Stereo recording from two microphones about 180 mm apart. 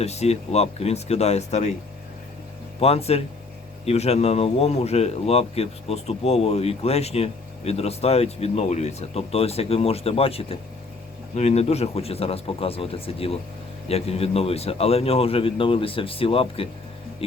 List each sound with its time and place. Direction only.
0.0 s speech: 35° left (ahead or behind)
2.8 s speech: 35° left (ahead or behind)